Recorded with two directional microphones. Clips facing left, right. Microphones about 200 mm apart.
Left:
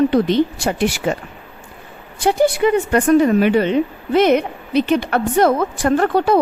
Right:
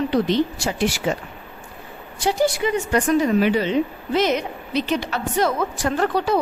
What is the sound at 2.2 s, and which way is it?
A woman's voice, 55° left (ahead or behind).